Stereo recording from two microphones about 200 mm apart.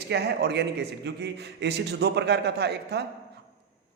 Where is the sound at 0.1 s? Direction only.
55° right (ahead or behind).